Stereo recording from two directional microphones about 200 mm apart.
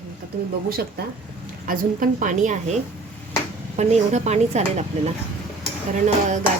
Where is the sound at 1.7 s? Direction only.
40° right (ahead or behind).